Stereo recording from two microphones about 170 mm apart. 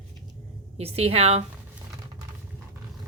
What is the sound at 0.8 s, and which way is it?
Speech, 35° right (ahead or behind).